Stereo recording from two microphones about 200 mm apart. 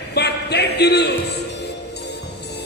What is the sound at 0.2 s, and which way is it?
Speech, 55° left (ahead or behind).